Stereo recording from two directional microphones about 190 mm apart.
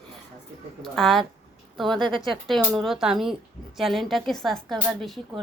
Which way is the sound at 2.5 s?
Centre (ahead or behind).